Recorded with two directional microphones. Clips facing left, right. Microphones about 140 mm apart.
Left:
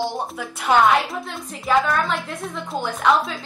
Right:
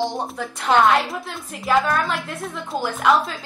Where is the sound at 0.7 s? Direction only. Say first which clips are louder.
Even; 10° left (ahead or behind).